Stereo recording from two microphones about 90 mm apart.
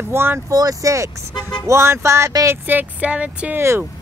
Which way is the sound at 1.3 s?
50° left (ahead or behind).